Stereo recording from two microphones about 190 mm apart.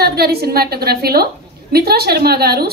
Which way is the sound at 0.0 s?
55° right (ahead or behind).